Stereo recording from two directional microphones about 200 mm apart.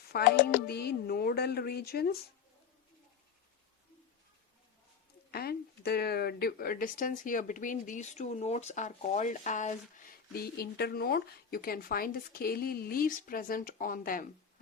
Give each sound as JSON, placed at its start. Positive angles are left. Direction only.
{"t": 0.1, "sound": "speech", "side_deg": 50}
{"t": 5.3, "sound": "speech", "side_deg": 50}